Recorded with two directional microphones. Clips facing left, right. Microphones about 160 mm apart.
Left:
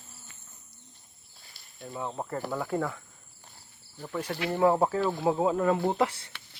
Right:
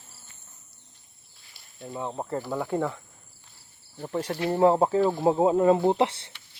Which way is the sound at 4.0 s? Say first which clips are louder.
Right 4 dB; 35° right (ahead or behind).